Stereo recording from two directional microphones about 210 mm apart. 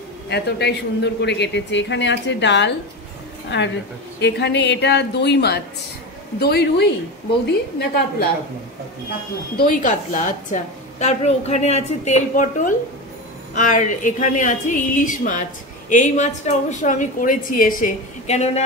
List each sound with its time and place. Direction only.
0.3 s a man's voice: 50° left (ahead or behind)
9.6 s a woman's voice: 40° left (ahead or behind)